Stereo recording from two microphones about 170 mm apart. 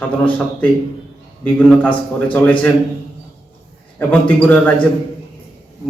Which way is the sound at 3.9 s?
5° left (ahead or behind).